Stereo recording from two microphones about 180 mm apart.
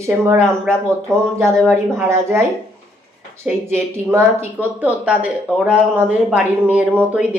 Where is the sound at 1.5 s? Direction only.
5° left (ahead or behind).